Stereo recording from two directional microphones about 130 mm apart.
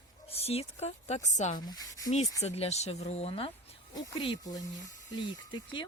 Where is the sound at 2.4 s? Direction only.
55° left (ahead or behind).